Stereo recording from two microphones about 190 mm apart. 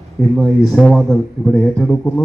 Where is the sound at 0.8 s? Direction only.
Centre (ahead or behind).